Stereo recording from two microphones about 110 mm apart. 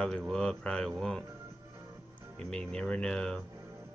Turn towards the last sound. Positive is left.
turn(degrees=5)  # may be behind; listen again after turning